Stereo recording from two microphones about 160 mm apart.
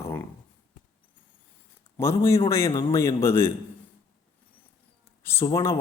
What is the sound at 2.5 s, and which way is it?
A man's voice, 15° left (ahead or behind).